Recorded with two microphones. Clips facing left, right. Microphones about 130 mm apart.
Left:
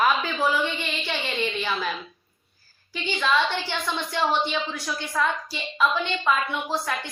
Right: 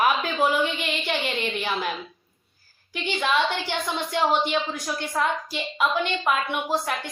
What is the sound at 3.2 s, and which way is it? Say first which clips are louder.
A woman's voice: even; 20° right (ahead or behind).